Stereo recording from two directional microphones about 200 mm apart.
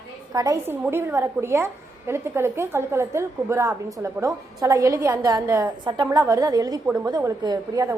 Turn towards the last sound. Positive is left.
turn(degrees=-20)  # may be behind; listen again after turning